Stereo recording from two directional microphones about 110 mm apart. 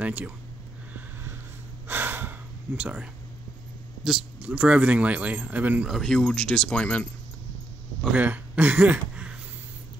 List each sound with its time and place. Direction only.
0.0 s speech: 15° right (ahead or behind)
1.9 s breathing: 20° right (ahead or behind)
2.8 s speech: 10° right (ahead or behind)
5.9 s speech: centre (ahead or behind)
8.1 s speech: 15° right (ahead or behind)